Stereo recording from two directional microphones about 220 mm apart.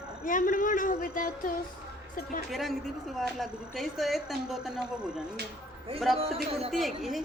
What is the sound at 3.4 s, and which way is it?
Speech, centre (ahead or behind).